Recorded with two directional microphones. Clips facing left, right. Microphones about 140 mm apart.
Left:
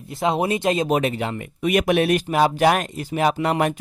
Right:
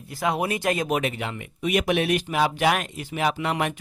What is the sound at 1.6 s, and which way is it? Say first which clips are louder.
Speech: left 4 dB; 50° left (ahead or behind).